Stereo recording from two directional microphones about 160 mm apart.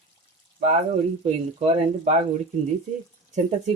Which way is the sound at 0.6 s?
50° right (ahead or behind).